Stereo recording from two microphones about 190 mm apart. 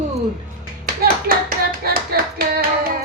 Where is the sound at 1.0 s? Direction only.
50° right (ahead or behind).